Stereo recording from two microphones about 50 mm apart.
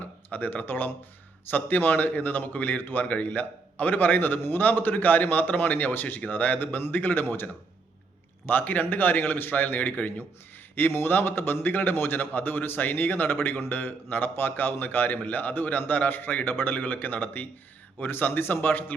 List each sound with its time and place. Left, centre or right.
0.0 s a man's voice: left
8.4 s a man's voice: left